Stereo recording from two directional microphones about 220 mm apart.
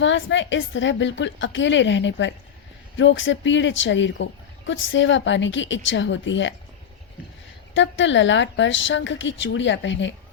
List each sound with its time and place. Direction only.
0.0 s speech: 55° left (ahead or behind)
7.7 s speech: 55° left (ahead or behind)